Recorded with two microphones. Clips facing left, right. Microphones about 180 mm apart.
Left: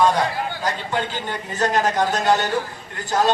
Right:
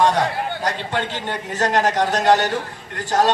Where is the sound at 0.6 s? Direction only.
70° right (ahead or behind).